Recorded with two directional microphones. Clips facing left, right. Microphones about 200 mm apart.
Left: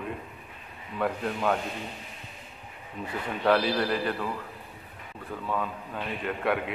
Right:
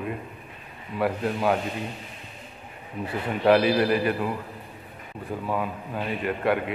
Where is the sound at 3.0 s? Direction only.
5° right (ahead or behind).